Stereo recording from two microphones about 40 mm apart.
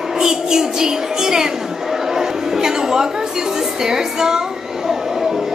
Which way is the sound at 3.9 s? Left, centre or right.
Centre.